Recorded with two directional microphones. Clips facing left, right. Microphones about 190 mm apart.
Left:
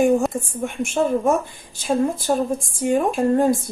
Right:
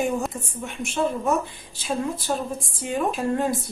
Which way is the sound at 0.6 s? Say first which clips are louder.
Left 4 dB; 45° left (ahead or behind).